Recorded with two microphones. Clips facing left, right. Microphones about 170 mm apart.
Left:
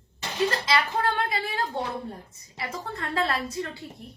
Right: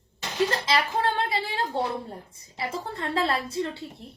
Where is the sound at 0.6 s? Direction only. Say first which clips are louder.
Even; 25° right (ahead or behind).